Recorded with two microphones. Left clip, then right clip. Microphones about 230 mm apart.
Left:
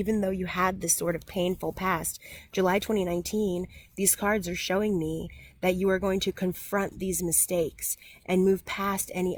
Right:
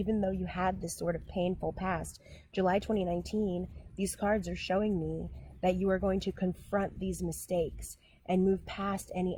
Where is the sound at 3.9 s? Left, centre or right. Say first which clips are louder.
Left 5 dB; left.